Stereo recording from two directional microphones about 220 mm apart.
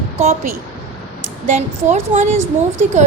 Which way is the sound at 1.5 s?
35° right (ahead or behind).